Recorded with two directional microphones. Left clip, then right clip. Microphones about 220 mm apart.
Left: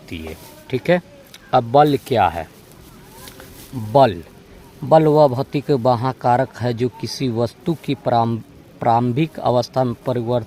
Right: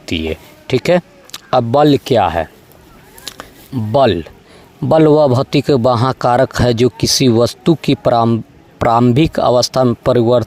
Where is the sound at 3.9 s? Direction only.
40° right (ahead or behind).